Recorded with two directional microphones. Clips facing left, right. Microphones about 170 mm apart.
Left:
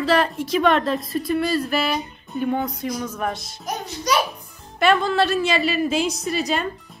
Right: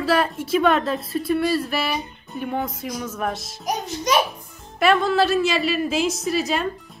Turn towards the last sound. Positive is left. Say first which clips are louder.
# right 1 dB
turn(degrees=0)  # may be behind; listen again after turning